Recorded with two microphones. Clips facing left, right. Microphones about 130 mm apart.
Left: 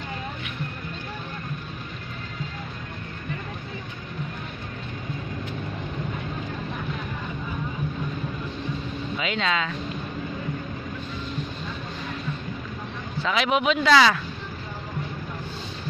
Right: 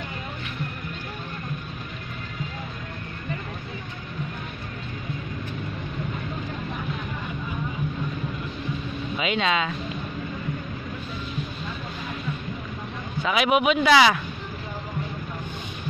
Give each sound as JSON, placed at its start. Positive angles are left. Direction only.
{"t": 9.2, "sound": "speech", "side_deg": -20}
{"t": 13.2, "sound": "speech", "side_deg": -10}